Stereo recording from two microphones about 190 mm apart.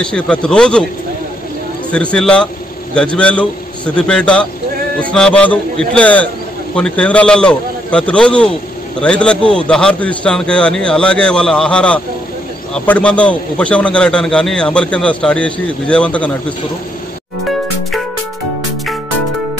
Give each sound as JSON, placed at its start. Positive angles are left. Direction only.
{"t": 0.0, "sound": "a man's voice", "side_deg": 5}
{"t": 1.9, "sound": "a man's voice", "side_deg": 5}